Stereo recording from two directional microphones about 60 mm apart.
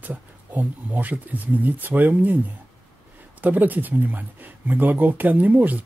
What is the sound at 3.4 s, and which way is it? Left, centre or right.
Speech, right.